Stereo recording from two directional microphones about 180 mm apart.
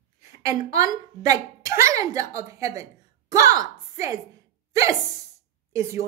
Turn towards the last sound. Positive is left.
turn(degrees=-15)  # may be behind; listen again after turning